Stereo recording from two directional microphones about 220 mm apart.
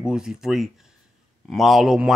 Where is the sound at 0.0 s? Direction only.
5° right (ahead or behind).